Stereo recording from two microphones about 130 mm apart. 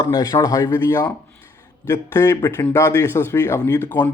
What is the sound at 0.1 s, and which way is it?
Speech, 25° left (ahead or behind).